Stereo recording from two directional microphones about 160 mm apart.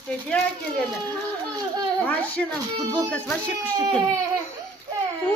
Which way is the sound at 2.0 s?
10° left (ahead or behind).